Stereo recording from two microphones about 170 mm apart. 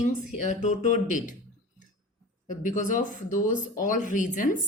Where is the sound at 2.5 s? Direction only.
50° left (ahead or behind).